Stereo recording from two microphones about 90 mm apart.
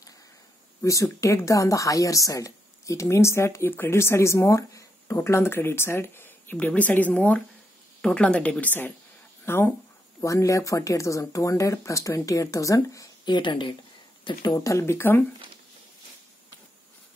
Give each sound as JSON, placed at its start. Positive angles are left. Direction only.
{"t": 0.8, "sound": "a woman's voice", "side_deg": 35}
{"t": 10.2, "sound": "speech", "side_deg": 35}
{"t": 13.2, "sound": "speech", "side_deg": 60}
{"t": 14.5, "sound": "speech", "side_deg": 35}